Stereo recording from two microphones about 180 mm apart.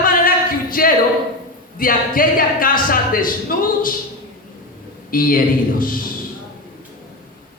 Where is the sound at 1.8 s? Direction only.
50° left (ahead or behind).